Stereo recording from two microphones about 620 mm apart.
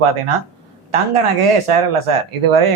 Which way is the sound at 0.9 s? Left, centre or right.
Right.